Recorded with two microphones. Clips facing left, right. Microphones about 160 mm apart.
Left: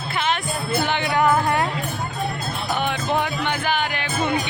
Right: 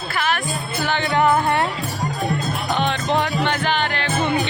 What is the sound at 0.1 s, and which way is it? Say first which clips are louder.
Music: right 1 dB; 20° left (ahead or behind).